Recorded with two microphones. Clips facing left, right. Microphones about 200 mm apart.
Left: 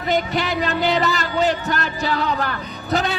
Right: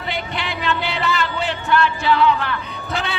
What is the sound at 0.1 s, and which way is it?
A man's voice, 40° left (ahead or behind).